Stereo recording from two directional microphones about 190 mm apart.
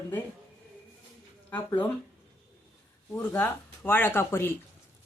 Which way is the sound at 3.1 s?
10° left (ahead or behind).